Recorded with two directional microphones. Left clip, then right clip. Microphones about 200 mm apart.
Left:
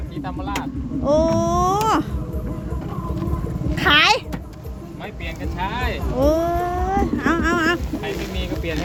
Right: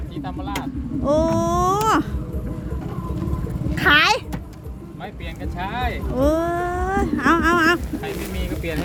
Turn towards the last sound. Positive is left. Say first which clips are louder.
# right 3 dB
turn(degrees=-10)  # may be behind; listen again after turning